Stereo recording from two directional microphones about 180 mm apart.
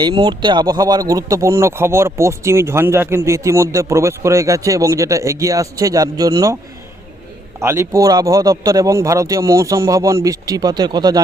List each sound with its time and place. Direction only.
0.0 s a man's voice: 25° right (ahead or behind)
7.6 s a man's voice: 15° right (ahead or behind)